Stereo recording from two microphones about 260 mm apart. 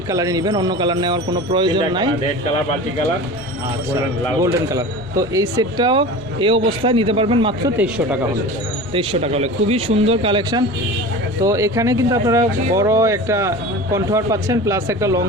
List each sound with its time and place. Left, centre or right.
0.1 s speech: centre
4.7 s speech: centre
7.8 s speech: centre
8.9 s speech: right